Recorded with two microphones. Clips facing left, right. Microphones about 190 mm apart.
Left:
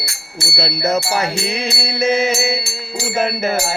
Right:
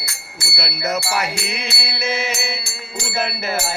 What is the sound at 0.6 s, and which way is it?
Mantra, 30° left (ahead or behind).